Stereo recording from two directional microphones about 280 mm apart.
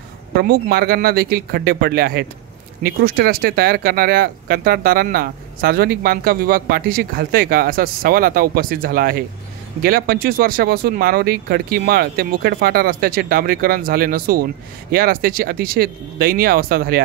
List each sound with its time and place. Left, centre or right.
0.4 s speech: right